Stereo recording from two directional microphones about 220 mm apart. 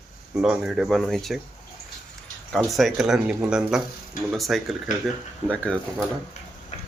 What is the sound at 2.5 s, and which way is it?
Speech, centre (ahead or behind).